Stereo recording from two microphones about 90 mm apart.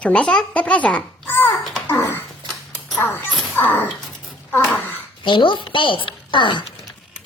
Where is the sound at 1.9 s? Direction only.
25° left (ahead or behind).